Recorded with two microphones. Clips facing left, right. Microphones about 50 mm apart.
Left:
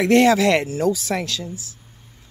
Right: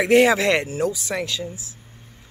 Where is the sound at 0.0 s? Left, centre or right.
Centre.